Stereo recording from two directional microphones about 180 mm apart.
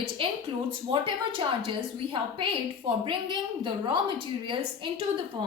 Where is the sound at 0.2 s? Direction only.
30° right (ahead or behind).